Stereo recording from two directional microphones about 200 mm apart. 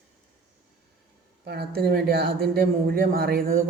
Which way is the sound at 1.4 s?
50° right (ahead or behind).